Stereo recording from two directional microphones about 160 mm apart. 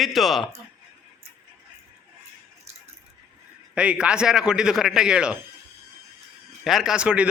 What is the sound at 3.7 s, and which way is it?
A man's voice, 5° right (ahead or behind).